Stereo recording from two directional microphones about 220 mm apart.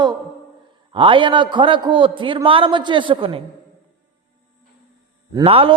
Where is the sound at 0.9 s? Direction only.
25° right (ahead or behind).